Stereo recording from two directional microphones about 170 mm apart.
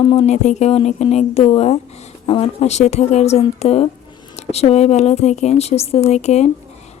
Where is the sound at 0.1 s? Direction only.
40° left (ahead or behind).